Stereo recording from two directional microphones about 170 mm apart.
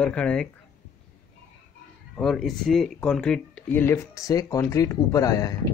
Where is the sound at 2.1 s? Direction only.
Centre (ahead or behind).